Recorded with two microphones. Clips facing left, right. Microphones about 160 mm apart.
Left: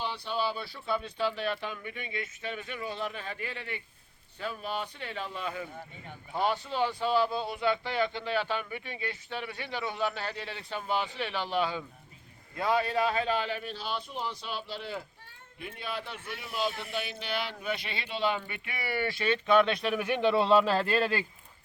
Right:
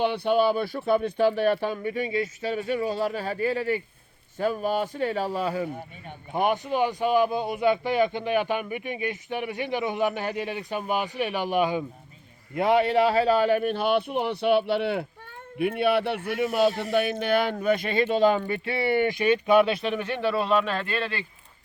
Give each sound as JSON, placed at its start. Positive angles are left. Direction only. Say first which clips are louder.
{"t": 0.0, "sound": "speech", "louder": "right 11 dB", "side_deg": -60}
{"t": 6.1, "sound": "a man's voice", "louder": "right 5 dB", "side_deg": -20}
{"t": 16.9, "sound": "speech", "louder": "right 12 dB", "side_deg": -55}